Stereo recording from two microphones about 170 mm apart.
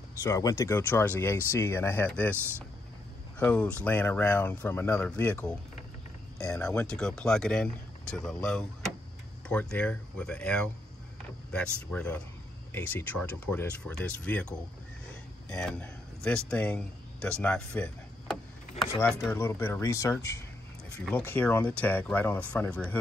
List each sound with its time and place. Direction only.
0.2 s speech: 20° left (ahead or behind)
3.3 s speech: 5° left (ahead or behind)
6.6 s speech: 5° left (ahead or behind)
15.5 s a man's voice: 5° left (ahead or behind)